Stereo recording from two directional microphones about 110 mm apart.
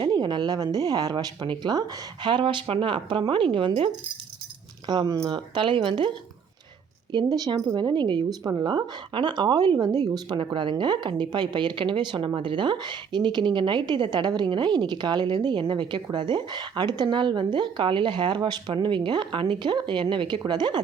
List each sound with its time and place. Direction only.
0.0 s a woman's voice: 40° right (ahead or behind)
4.9 s a woman's voice: 40° right (ahead or behind)